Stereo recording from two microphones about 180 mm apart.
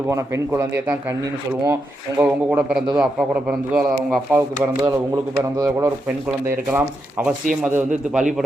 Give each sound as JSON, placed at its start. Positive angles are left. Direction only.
{"t": 0.1, "sound": "a man's voice", "side_deg": -15}